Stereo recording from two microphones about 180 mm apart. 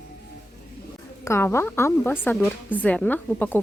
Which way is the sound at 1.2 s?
15° left (ahead or behind).